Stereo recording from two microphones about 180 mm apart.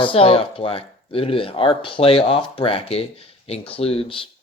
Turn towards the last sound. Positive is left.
turn(degrees=30)  # may be behind; listen again after turning